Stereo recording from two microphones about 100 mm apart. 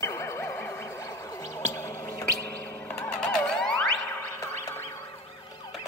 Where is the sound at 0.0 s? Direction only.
30° left (ahead or behind).